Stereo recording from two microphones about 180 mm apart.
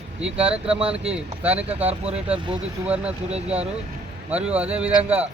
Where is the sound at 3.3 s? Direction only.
35° right (ahead or behind).